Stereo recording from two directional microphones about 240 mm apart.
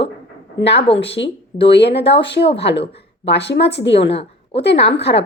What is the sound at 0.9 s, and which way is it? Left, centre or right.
Speech, centre.